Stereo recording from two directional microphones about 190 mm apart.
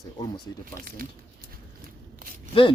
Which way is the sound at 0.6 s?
50° right (ahead or behind).